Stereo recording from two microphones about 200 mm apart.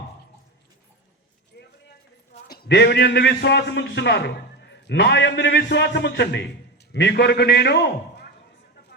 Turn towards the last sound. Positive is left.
turn(degrees=55)  # may be behind; listen again after turning